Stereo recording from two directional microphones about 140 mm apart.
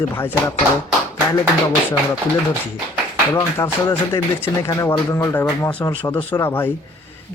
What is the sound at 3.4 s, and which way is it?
A man's voice, 25° left (ahead or behind).